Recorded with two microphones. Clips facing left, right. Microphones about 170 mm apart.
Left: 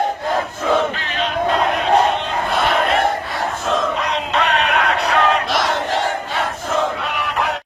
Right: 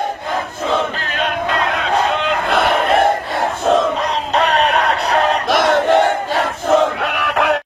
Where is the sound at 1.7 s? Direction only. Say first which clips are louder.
Left 2 dB; 90° right.